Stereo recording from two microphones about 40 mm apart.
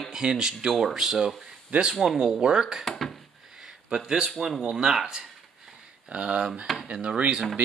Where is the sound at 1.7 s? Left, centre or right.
Right.